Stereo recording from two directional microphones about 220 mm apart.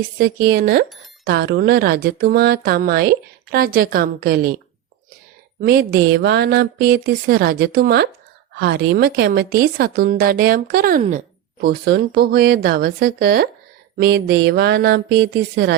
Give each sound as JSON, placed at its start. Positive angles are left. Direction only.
{"t": 0.2, "sound": "speech", "side_deg": -45}
{"t": 11.6, "sound": "speech", "side_deg": -45}